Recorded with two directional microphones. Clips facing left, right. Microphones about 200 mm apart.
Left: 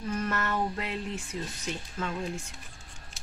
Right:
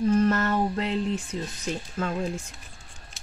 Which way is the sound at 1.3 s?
30° right (ahead or behind).